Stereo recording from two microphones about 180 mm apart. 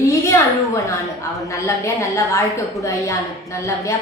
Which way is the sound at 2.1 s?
15° left (ahead or behind).